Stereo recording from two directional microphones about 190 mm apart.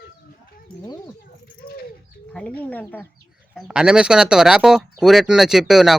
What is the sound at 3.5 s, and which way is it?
Speech, 5° right (ahead or behind).